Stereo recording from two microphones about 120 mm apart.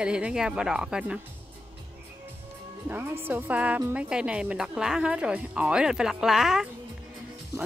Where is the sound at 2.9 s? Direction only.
15° right (ahead or behind).